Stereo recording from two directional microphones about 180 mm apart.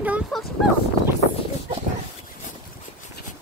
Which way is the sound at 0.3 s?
Centre (ahead or behind).